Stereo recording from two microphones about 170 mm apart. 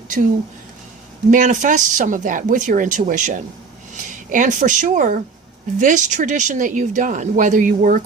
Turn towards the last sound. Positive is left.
turn(degrees=-50)  # may be behind; listen again after turning